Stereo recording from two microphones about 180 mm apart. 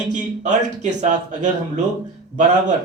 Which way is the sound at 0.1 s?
40° right (ahead or behind).